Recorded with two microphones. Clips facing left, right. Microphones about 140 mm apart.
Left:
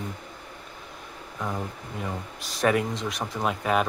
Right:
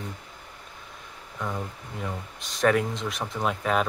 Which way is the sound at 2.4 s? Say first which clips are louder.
Right 1 dB; centre (ahead or behind).